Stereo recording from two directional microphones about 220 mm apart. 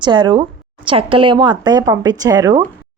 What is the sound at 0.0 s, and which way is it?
Speech, 20° right (ahead or behind).